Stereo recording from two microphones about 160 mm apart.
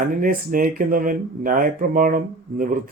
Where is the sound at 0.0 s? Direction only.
60° right (ahead or behind).